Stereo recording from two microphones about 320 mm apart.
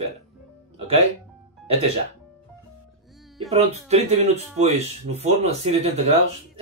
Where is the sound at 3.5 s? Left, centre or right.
Centre.